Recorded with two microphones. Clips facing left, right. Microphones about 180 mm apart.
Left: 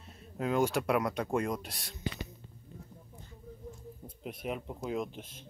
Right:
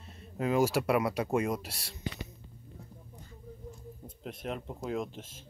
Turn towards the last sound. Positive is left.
turn(degrees=0)  # may be behind; listen again after turning